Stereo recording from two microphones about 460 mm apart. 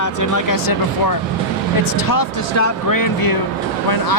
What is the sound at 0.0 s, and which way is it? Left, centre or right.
Speech, left.